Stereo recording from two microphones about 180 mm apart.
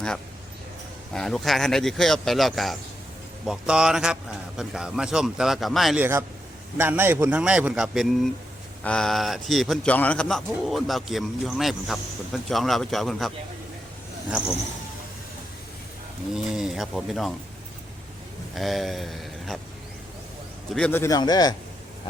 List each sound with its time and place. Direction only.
1.1 s speech: centre (ahead or behind)
6.0 s a man's voice: 15° right (ahead or behind)
16.3 s speech: 5° right (ahead or behind)
18.5 s speech: centre (ahead or behind)
20.7 s a man's voice: 10° left (ahead or behind)